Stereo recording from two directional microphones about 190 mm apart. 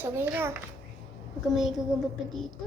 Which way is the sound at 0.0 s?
10° right (ahead or behind).